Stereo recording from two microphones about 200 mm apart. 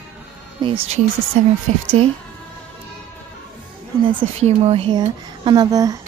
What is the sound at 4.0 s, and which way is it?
A woman's voice, 25° right (ahead or behind).